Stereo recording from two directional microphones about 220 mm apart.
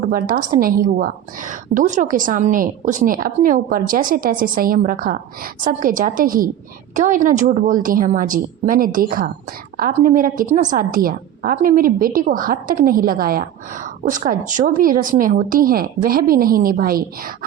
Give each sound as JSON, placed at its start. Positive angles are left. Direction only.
{"t": 0.9, "sound": "a woman's voice", "side_deg": -40}